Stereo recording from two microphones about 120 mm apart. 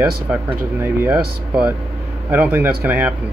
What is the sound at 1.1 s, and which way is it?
Speech, 10° right (ahead or behind).